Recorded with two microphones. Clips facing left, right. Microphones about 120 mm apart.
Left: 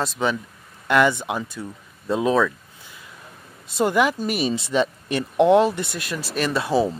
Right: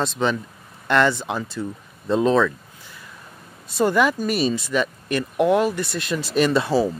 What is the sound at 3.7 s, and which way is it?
Speech, 15° left (ahead or behind).